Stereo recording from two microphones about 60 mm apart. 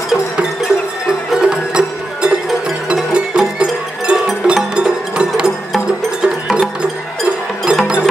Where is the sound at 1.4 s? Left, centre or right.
Centre.